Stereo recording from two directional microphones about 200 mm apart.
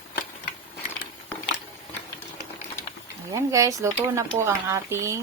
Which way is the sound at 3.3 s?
15° right (ahead or behind).